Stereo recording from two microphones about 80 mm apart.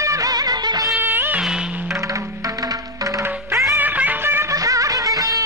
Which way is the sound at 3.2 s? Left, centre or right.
Right.